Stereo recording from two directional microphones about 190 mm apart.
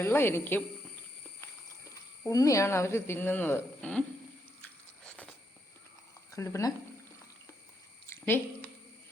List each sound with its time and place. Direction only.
0.0 s speech: 10° left (ahead or behind)
5.0 s a sound: 5° left (ahead or behind)
6.3 s speech: 15° left (ahead or behind)